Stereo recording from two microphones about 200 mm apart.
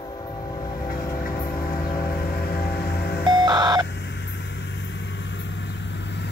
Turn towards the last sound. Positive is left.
turn(degrees=60)  # may be behind; listen again after turning